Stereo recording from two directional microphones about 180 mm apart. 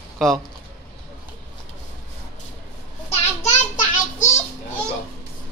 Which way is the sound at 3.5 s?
45° left (ahead or behind).